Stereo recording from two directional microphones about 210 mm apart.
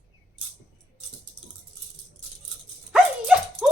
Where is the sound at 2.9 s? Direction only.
5° right (ahead or behind).